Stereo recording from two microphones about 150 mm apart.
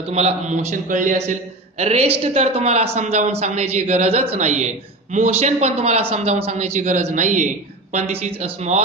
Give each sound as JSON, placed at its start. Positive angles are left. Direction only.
{"t": 0.1, "sound": "a man's voice", "side_deg": -45}
{"t": 1.8, "sound": "a man's voice", "side_deg": -45}